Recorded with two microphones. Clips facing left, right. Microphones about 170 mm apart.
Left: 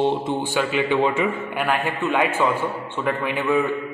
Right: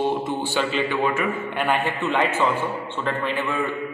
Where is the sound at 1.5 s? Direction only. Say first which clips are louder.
Even; 5° left (ahead or behind).